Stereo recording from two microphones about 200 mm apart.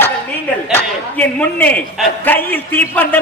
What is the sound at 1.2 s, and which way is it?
A man's voice, 10° left (ahead or behind).